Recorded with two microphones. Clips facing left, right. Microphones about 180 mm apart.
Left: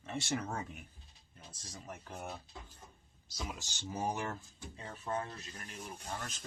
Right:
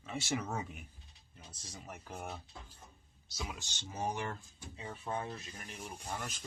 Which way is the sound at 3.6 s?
45° left (ahead or behind).